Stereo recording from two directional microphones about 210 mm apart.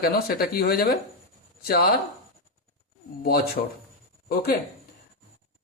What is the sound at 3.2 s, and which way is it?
Speech, 45° left (ahead or behind).